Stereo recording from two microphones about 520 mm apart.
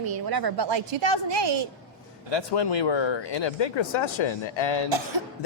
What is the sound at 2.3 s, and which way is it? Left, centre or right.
Speech, left.